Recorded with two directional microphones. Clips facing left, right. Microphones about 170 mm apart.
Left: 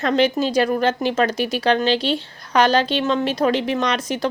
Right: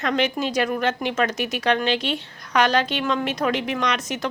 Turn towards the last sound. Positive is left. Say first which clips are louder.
# left 3 dB
turn(degrees=30)  # may be behind; listen again after turning